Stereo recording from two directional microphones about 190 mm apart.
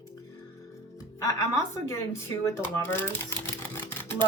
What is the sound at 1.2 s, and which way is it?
A woman's voice, 15° left (ahead or behind).